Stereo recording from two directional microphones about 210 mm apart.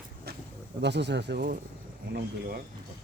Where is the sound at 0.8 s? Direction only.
55° right (ahead or behind).